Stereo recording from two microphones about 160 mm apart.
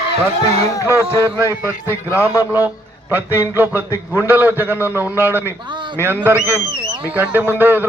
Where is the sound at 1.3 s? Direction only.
15° right (ahead or behind).